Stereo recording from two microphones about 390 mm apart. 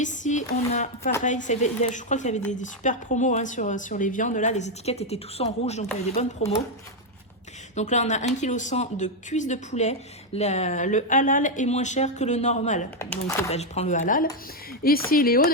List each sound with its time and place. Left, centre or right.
0.0 s speech: centre
7.8 s speech: centre